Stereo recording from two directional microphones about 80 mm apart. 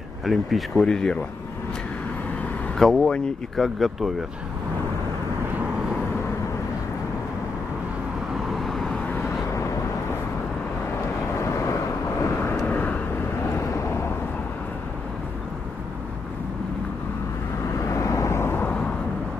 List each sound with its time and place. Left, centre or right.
0.2 s speech: centre
2.8 s speech: centre
8.5 s vehicle: centre
11.4 s vehicle: left
12.6 s vehicle: left
13.5 s vehicle: left
17.6 s vehicle: left